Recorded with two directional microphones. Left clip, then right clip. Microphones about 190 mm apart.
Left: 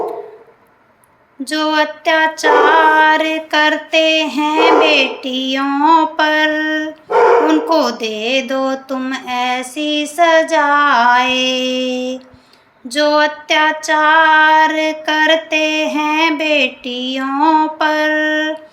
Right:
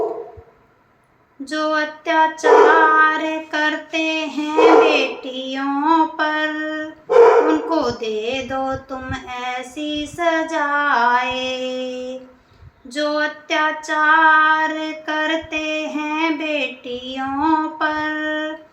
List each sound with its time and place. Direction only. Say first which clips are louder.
1.5 s female singing: left 5 dB; 50° left (ahead or behind)